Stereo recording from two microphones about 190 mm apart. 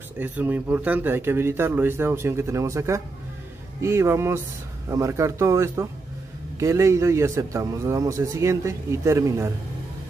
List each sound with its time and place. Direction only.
0.2 s a man's voice: 10° right (ahead or behind)